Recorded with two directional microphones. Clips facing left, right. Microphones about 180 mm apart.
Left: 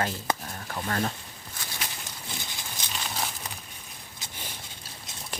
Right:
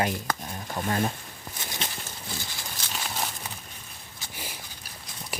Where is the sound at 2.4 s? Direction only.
20° left (ahead or behind).